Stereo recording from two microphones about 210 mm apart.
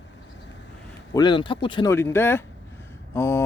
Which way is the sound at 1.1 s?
20° left (ahead or behind).